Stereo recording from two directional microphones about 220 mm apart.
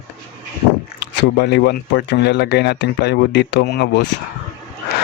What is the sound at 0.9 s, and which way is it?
Speech, 50° left (ahead or behind).